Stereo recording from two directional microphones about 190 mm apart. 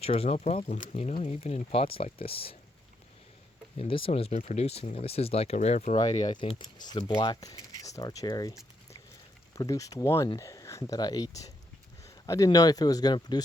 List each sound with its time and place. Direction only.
0.0 s speech: 30° left (ahead or behind)
3.8 s speech: 30° left (ahead or behind)